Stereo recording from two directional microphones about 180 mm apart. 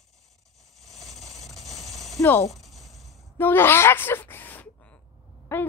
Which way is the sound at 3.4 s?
10° left (ahead or behind).